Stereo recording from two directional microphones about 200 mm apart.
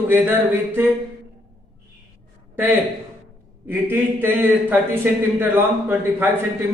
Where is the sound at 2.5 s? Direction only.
10° right (ahead or behind).